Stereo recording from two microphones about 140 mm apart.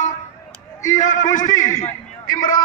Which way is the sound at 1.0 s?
65° left (ahead or behind).